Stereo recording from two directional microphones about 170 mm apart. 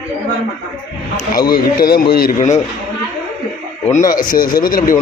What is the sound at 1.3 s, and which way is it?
A man's voice, 60° left (ahead or behind).